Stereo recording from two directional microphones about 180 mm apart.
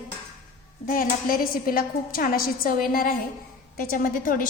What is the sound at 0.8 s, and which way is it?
A woman's voice, 50° left (ahead or behind).